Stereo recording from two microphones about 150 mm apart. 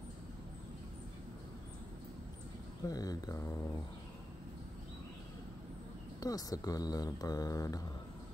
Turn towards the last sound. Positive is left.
turn(degrees=25)  # may be behind; listen again after turning